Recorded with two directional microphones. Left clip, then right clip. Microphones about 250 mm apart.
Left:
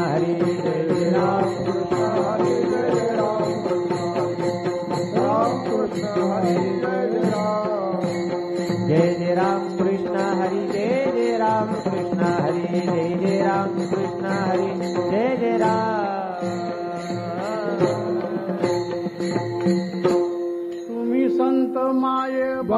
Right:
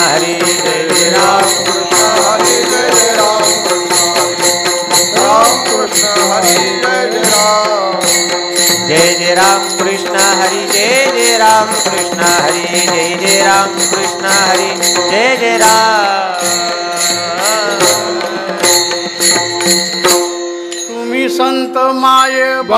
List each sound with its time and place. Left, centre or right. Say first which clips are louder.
0.7 s mantra: right 11 dB; centre
2.1 s music: right 11 dB; centre
4.9 s jingle bell: right 12 dB; centre
6.4 s music: right 11 dB; centre
8.6 s jingle bell: right 10 dB; centre
10.1 s music: right 12 dB; centre
19.3 s jingle bell: right 9 dB; centre
21.2 s music: right 8 dB; centre